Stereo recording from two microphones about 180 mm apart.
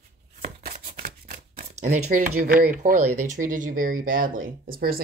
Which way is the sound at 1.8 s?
40° right (ahead or behind).